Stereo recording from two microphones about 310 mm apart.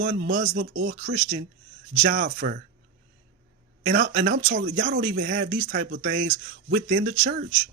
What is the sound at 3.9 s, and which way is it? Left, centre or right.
Speech, right.